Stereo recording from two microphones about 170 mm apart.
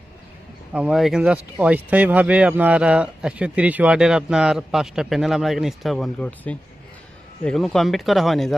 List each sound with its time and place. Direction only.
0.7 s speech: 5° right (ahead or behind)